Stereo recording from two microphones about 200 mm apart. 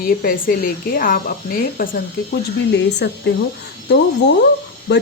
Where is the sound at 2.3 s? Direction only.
60° left (ahead or behind).